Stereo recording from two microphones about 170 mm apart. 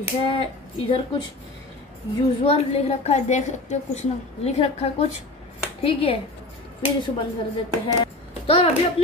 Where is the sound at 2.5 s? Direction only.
40° left (ahead or behind).